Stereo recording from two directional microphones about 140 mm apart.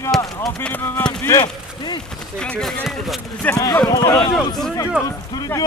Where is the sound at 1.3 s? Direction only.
25° left (ahead or behind).